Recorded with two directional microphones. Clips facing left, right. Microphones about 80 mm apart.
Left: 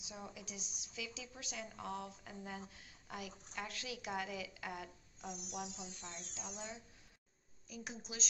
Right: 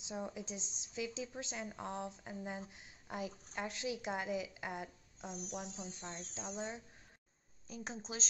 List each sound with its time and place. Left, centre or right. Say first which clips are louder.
0.0 s a woman's voice: right 7 dB; right
5.3 s a woman's voice: right 1 dB; right